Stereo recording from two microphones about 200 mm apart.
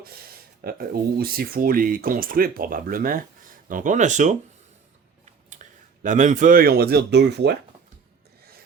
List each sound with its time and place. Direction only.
0.6 s speech: 50° right (ahead or behind)